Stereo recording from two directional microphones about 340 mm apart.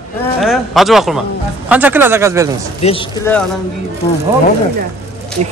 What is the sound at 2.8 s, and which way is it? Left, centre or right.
Speech, centre.